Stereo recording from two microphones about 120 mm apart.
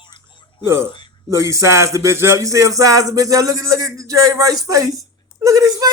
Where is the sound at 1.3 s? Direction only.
25° right (ahead or behind).